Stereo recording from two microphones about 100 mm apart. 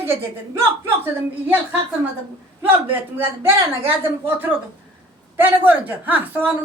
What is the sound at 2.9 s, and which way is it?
A woman's voice, 20° right (ahead or behind).